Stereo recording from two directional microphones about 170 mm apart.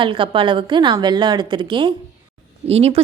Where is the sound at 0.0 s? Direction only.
30° right (ahead or behind).